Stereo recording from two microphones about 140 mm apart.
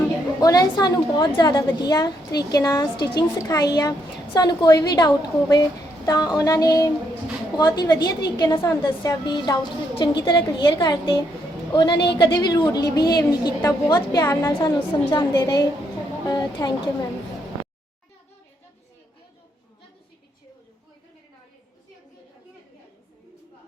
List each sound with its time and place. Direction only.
0.3 s a woman's voice: 25° left (ahead or behind)